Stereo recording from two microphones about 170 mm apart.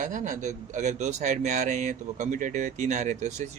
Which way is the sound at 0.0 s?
50° right (ahead or behind).